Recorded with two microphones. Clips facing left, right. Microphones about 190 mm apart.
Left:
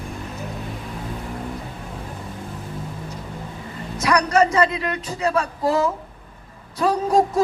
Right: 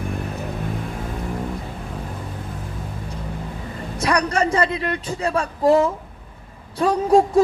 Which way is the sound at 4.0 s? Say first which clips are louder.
Left 2 dB; 30° right (ahead or behind).